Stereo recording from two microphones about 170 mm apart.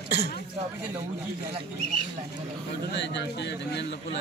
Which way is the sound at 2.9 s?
90° left.